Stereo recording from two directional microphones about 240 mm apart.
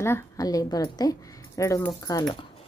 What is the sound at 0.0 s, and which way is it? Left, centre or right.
A woman's voice, centre.